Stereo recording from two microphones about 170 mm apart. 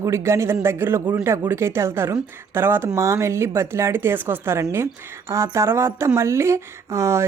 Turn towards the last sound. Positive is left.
turn(degrees=-15)  # may be behind; listen again after turning